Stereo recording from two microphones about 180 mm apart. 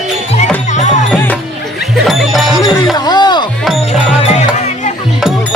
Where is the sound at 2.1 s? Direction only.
Centre (ahead or behind).